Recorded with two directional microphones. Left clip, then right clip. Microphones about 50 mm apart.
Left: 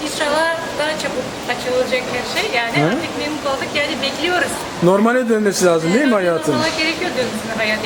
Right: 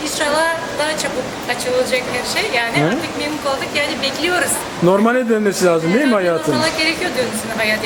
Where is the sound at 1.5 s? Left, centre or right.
Centre.